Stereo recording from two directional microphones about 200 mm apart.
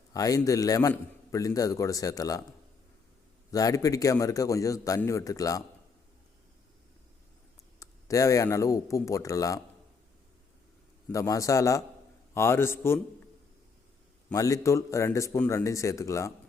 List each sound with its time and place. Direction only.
0.1 s a man's voice: 15° left (ahead or behind)
3.5 s a man's voice: 15° left (ahead or behind)
7.8 s a man's voice: 15° left (ahead or behind)
11.1 s a man's voice: 15° left (ahead or behind)
14.3 s a man's voice: 15° left (ahead or behind)